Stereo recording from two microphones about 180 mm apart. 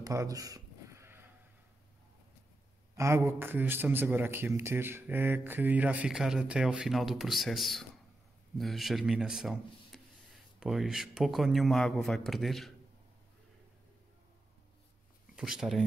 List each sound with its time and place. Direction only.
0.0 s a sound: 20° right (ahead or behind)
3.0 s a man's voice: 15° right (ahead or behind); by 12.7 s centre (ahead or behind)
15.3 s speech: 5° right (ahead or behind)